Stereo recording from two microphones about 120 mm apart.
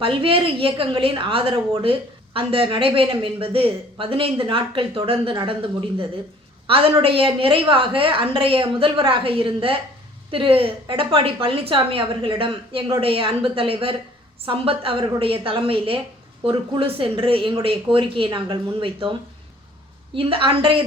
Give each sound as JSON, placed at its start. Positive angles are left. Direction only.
{"t": 0.0, "sound": "a woman's voice", "side_deg": -45}
{"t": 6.7, "sound": "a woman's voice", "side_deg": -50}
{"t": 20.1, "sound": "a woman's voice", "side_deg": -50}